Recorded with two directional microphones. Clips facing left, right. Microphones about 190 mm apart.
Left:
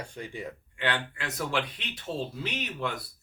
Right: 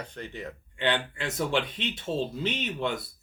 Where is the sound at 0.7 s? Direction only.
25° right (ahead or behind).